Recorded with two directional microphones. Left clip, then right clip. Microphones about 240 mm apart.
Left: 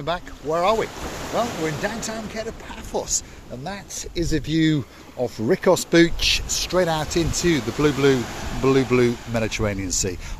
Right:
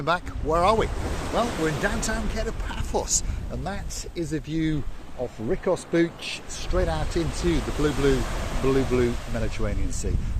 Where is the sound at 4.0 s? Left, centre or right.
Left.